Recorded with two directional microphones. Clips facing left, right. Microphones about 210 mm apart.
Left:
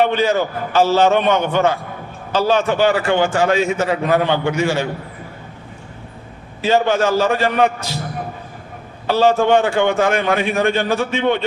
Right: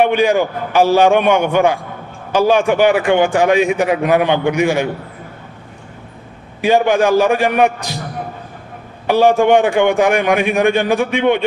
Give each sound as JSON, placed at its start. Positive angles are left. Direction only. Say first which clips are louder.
{"t": 0.0, "sound": "a man's voice", "louder": "right 3 dB", "side_deg": -15}
{"t": 6.6, "sound": "a man's voice", "louder": "right 3 dB", "side_deg": -15}
{"t": 9.0, "sound": "a man's voice", "louder": "right 3 dB", "side_deg": -15}